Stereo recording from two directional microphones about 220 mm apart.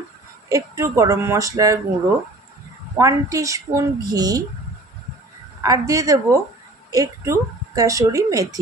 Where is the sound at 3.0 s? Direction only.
15° right (ahead or behind).